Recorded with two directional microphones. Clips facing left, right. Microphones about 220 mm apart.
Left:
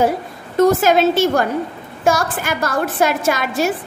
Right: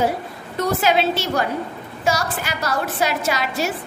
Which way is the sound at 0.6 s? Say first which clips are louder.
Left 6 dB; 45° left (ahead or behind).